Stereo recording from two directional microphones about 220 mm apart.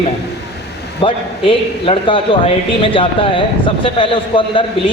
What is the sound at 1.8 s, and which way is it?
Speech, 25° left (ahead or behind).